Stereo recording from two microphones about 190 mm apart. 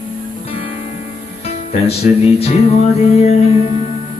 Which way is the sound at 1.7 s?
30° left (ahead or behind).